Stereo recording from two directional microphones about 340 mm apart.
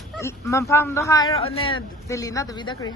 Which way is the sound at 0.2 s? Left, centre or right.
Centre.